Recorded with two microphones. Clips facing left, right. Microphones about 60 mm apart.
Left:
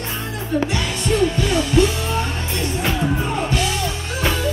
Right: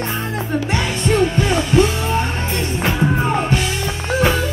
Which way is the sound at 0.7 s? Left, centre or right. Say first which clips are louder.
Right 3 dB; right.